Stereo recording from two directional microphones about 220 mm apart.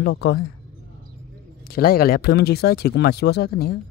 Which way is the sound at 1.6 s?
45° left (ahead or behind).